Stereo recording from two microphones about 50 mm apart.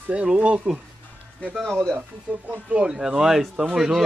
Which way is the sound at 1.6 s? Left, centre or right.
Centre.